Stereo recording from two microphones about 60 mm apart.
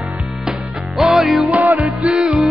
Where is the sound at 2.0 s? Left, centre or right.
Centre.